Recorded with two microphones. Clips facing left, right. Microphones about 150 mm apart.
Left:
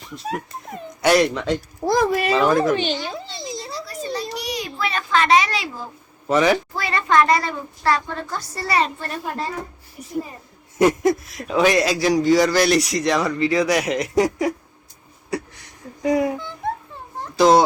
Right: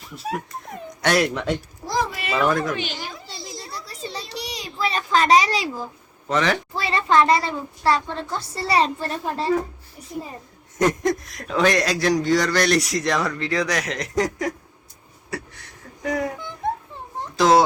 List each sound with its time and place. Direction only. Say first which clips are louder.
0.2 s a man's voice: even; centre (ahead or behind)
1.8 s a child's voice: left 7 dB; 50° left (ahead or behind)
2.7 s a sound: left 7 dB; 30° left (ahead or behind)
4.1 s a sound: left 8 dB; 30° right (ahead or behind)
6.2 s speech: left 4 dB; 10° left (ahead or behind)
6.7 s a child's voice: even; 30° right (ahead or behind)
10.8 s a man's voice: left 4 dB; 10° left (ahead or behind)
15.3 s a sound: left 5 dB; 15° left (ahead or behind)
16.0 s speech: left 6 dB; 10° left (ahead or behind)
17.3 s speech: left 2 dB; centre (ahead or behind)